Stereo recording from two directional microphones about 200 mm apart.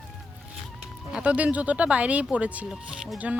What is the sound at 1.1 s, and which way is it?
Speech, 5° right (ahead or behind).